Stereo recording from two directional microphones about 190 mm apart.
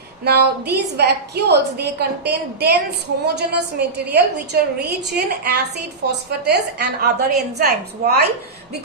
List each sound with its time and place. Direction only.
0.3 s a woman's voice: 60° right (ahead or behind)